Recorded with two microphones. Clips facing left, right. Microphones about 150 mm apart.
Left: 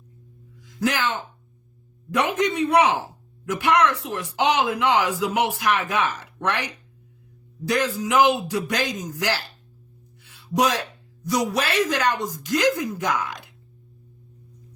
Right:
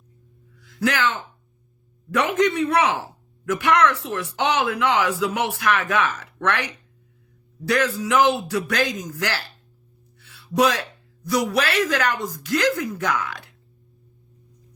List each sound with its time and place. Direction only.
0.6 s a sound: 15° left (ahead or behind)
2.0 s a woman's voice: 15° left (ahead or behind)
10.2 s music: 15° left (ahead or behind)
11.3 s a man's voice: 20° left (ahead or behind)